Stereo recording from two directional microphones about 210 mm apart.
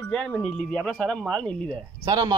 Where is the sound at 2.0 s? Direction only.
15° right (ahead or behind).